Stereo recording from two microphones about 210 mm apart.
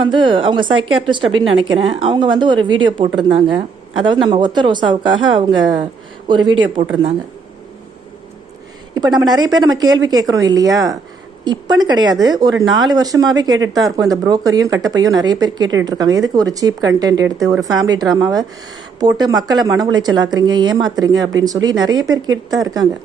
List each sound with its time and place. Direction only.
0.0 s a woman's voice: 20° right (ahead or behind)
9.0 s speech: 20° right (ahead or behind)